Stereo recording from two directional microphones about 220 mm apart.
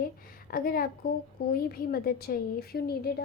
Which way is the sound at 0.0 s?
40° left (ahead or behind).